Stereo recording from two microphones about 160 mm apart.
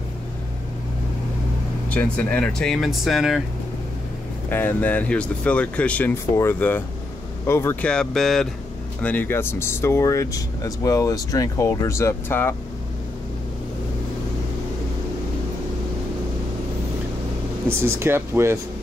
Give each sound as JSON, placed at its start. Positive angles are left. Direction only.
{"t": 1.9, "sound": "speech", "side_deg": 10}
{"t": 4.5, "sound": "speech", "side_deg": 10}
{"t": 17.7, "sound": "speech", "side_deg": -15}